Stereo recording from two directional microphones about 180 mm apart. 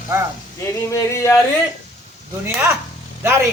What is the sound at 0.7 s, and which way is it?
Speech, 15° left (ahead or behind).